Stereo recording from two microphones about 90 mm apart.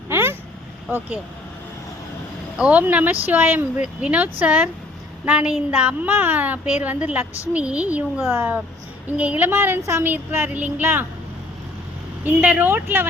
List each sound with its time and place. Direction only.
0.1 s vehicle: 25° right (ahead or behind)
2.6 s a woman's voice: 15° right (ahead or behind)
12.2 s a woman's voice: 15° right (ahead or behind)